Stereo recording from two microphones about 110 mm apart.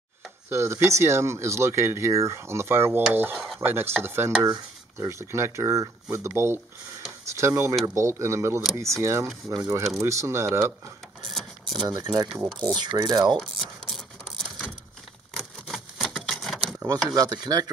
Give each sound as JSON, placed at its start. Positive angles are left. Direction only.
{"t": 0.5, "sound": "speech", "side_deg": -25}
{"t": 3.1, "sound": "mechanisms", "side_deg": -15}
{"t": 3.3, "sound": "dishes", "side_deg": 0}
{"t": 3.6, "sound": "speech", "side_deg": -20}
{"t": 11.9, "sound": "speech", "side_deg": -40}
{"t": 13.4, "sound": "mechanisms", "side_deg": 0}
{"t": 15.3, "sound": "a sound", "side_deg": 0}
{"t": 17.1, "sound": "speech", "side_deg": -40}